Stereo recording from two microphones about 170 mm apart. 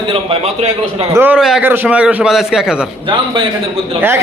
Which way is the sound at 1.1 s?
10° right (ahead or behind).